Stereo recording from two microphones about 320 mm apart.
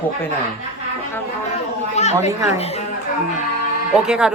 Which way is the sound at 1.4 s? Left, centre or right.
Left.